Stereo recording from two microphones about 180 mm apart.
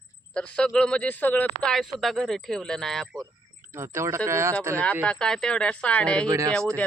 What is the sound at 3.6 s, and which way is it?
Speech, 15° right (ahead or behind).